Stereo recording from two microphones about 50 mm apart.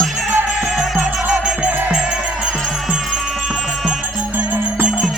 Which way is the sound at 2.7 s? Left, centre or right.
Centre.